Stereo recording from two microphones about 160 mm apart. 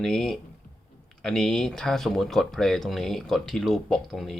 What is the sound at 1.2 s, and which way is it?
Speech, 5° left (ahead or behind).